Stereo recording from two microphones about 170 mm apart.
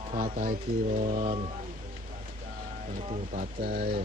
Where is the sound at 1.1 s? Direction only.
35° right (ahead or behind).